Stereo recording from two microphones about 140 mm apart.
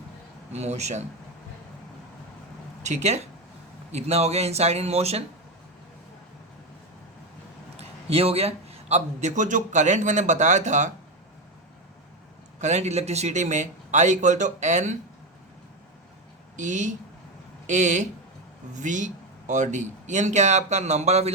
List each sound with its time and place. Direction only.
0.5 s speech: 50° right (ahead or behind)
2.8 s speech: 55° right (ahead or behind)
7.8 s a man's voice: 45° right (ahead or behind)
12.5 s a man's voice: 55° right (ahead or behind)
16.6 s a man's voice: 60° right (ahead or behind)